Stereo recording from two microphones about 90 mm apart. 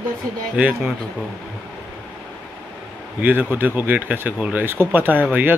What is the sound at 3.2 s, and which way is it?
Speech, 20° right (ahead or behind).